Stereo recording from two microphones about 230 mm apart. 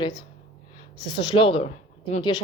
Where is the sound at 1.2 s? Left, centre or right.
Left.